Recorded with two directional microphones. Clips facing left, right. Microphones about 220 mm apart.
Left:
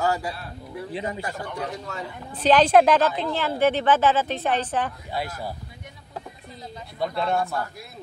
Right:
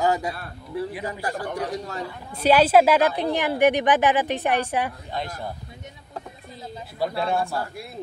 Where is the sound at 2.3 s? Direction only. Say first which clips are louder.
Even; 10° right (ahead or behind).